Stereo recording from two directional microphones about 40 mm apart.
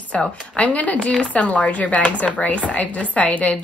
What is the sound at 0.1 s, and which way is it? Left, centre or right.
Speech, left.